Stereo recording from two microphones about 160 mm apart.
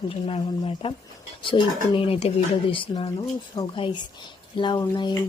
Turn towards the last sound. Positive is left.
turn(degrees=25)  # may be behind; listen again after turning